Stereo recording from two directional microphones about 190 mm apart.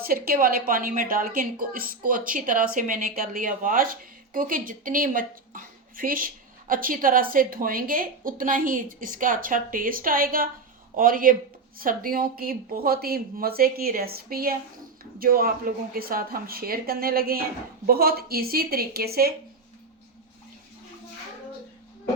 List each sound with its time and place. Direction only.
0.0 s a woman's voice: 50° right (ahead or behind)